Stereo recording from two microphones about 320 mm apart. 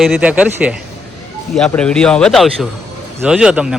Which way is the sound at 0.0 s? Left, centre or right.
Centre.